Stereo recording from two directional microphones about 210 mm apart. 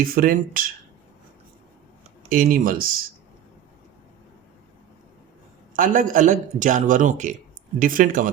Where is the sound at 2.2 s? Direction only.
40° right (ahead or behind).